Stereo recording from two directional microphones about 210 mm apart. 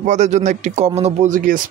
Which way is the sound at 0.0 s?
35° right (ahead or behind).